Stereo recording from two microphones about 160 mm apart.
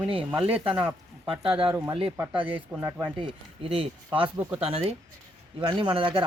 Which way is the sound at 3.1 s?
35° right (ahead or behind).